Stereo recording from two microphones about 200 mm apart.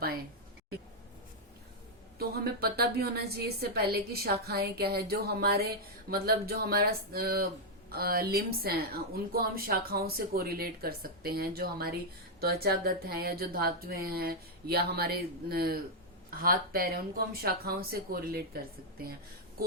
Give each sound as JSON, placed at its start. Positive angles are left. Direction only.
{"t": 2.1, "sound": "a woman's voice", "side_deg": -50}